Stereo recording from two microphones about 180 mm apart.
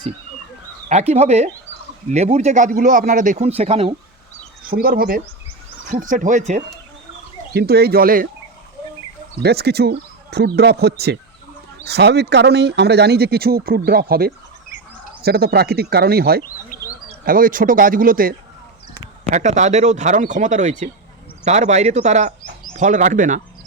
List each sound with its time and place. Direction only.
0.9 s a man's voice: 40° right (ahead or behind)
4.6 s a man's voice: 55° right (ahead or behind)
7.5 s speech: 60° right (ahead or behind)
9.4 s speech: 65° right (ahead or behind)
16.6 s a sound: 50° left (ahead or behind)
17.2 s a man's voice: 50° right (ahead or behind)
19.3 s a man's voice: 40° right (ahead or behind)